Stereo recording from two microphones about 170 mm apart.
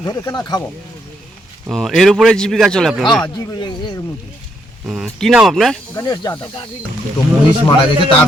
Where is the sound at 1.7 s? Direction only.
Centre (ahead or behind).